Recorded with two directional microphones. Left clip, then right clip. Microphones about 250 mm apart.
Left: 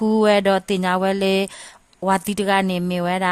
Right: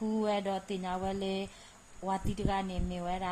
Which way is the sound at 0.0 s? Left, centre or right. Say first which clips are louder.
Left 16 dB; left.